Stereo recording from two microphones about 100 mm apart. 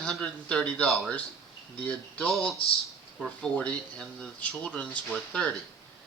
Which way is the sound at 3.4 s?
10° left (ahead or behind).